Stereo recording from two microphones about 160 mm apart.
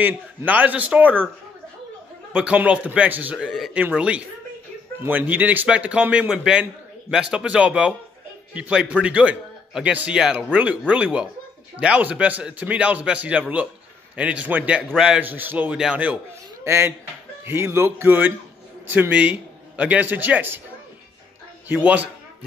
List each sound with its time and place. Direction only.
0.0 s a man's voice: 10° right (ahead or behind)
2.3 s a man's voice: 5° right (ahead or behind)
21.7 s a man's voice: 10° right (ahead or behind)